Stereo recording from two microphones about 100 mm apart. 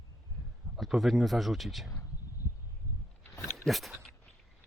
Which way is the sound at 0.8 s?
Centre (ahead or behind).